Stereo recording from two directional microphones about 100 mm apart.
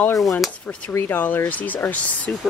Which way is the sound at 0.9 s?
25° left (ahead or behind).